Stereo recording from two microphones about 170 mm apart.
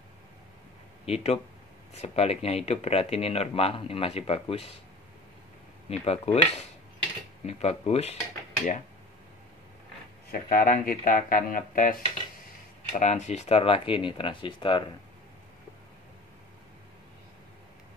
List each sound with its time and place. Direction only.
1.0 s speech: 40° left (ahead or behind)
5.9 s speech: 40° left (ahead or behind)
10.3 s speech: 55° left (ahead or behind); by 14.9 s 30° left (ahead or behind)